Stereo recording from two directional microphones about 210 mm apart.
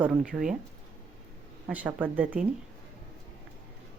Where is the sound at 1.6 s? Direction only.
5° right (ahead or behind).